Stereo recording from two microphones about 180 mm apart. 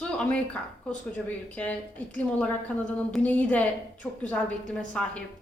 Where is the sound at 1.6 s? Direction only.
10° left (ahead or behind).